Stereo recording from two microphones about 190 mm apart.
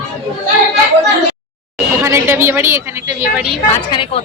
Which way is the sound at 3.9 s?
30° left (ahead or behind).